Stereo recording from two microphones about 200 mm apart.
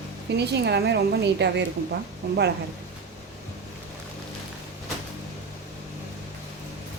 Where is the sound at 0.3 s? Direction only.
55° right (ahead or behind).